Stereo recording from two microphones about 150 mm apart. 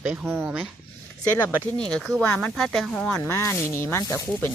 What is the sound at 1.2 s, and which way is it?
Speech, 15° left (ahead or behind).